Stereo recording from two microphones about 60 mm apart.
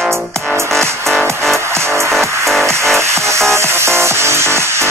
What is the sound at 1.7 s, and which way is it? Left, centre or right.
Music, right.